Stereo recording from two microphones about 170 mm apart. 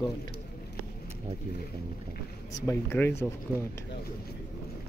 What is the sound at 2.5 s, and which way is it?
Speech, 15° left (ahead or behind).